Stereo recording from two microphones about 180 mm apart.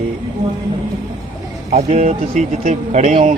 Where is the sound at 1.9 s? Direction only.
40° right (ahead or behind).